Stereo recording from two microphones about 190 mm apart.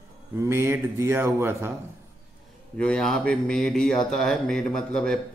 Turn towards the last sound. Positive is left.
turn(degrees=5)  # may be behind; listen again after turning